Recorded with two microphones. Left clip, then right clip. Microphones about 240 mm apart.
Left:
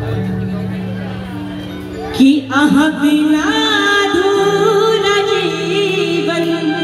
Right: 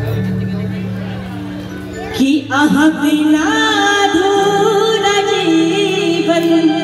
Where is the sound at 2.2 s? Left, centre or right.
Left.